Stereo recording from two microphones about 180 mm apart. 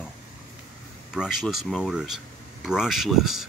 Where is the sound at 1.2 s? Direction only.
Centre (ahead or behind).